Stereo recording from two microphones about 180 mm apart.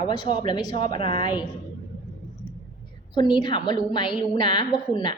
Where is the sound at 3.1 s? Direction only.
25° left (ahead or behind).